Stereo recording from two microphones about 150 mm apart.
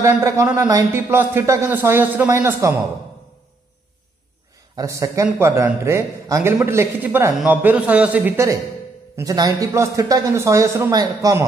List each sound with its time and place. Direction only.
0.0 s a man's voice: 20° right (ahead or behind)
4.7 s a man's voice: 20° right (ahead or behind)